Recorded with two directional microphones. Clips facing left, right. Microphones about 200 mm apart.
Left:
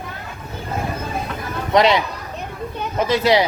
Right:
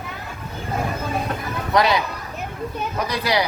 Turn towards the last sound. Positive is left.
turn(degrees=25)  # may be behind; listen again after turning